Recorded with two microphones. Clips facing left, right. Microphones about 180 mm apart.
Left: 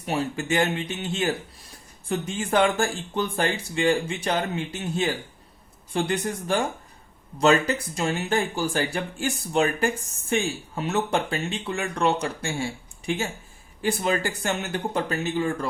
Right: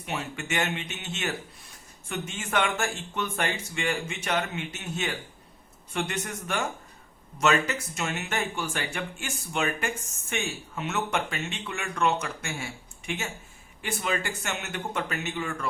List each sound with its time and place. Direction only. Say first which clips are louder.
0.0 s speech: left 7 dB; 35° left (ahead or behind)